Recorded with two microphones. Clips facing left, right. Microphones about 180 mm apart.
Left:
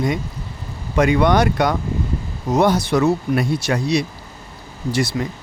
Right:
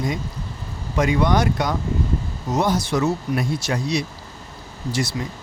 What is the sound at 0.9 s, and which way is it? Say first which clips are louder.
Speech: left 4 dB; 65° left (ahead or behind).